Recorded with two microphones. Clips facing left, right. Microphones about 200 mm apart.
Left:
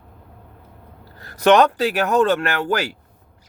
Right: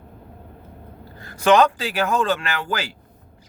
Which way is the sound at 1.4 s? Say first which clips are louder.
Left 2 dB; 65° left (ahead or behind).